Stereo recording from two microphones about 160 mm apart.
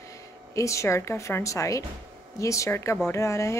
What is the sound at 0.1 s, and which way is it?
A woman's voice, 20° left (ahead or behind).